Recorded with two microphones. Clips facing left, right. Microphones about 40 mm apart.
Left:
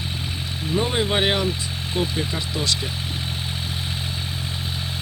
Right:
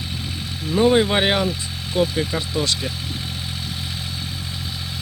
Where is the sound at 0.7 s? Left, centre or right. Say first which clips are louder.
Right 6 dB; centre.